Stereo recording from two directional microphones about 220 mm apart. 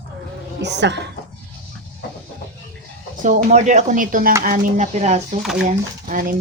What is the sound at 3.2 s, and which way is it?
Speech, 35° right (ahead or behind).